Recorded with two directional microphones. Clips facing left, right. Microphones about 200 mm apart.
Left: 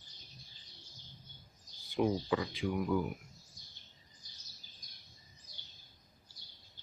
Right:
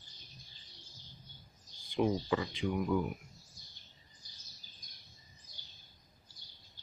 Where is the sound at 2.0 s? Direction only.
5° left (ahead or behind).